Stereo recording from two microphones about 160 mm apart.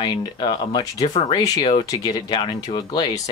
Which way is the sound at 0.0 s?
30° left (ahead or behind).